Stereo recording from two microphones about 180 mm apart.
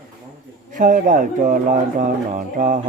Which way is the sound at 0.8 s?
45° right (ahead or behind).